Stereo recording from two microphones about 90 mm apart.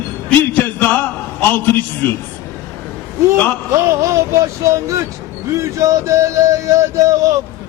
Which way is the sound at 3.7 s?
35° right (ahead or behind).